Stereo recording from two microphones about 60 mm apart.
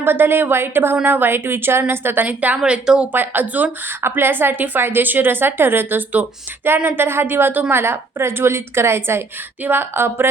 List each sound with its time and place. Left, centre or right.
0.0 s a woman's voice: right
2.2 s speech: right
2.6 s speech: centre
3.1 s speech: right
4.0 s a woman's voice: right